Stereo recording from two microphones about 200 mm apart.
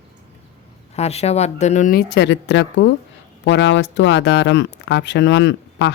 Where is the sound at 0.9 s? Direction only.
30° left (ahead or behind).